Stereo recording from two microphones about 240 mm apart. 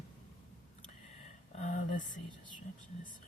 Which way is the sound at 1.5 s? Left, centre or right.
Left.